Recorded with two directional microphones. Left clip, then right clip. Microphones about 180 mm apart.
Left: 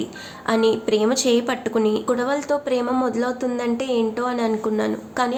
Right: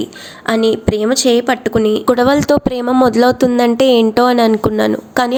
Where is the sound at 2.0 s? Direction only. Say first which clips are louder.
Right 10 dB; 50° right (ahead or behind).